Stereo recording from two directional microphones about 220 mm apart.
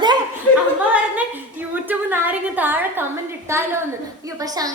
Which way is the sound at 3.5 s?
15° right (ahead or behind).